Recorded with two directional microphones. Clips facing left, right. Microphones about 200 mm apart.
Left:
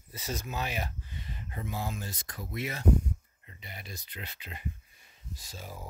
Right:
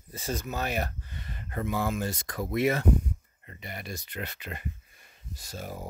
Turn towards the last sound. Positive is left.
turn(degrees=-50)  # may be behind; listen again after turning